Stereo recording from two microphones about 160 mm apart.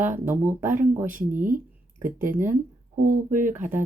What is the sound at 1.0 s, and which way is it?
Speech, 55° right (ahead or behind).